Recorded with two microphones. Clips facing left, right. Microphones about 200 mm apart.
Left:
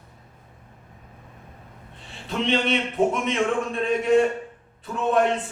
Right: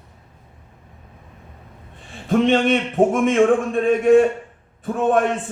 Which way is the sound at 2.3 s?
50° right (ahead or behind).